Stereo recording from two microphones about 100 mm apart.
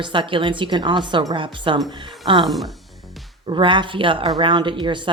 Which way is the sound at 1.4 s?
55° right (ahead or behind).